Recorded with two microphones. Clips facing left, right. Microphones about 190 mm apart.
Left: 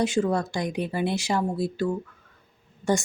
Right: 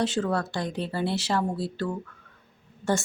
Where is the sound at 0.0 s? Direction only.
10° left (ahead or behind).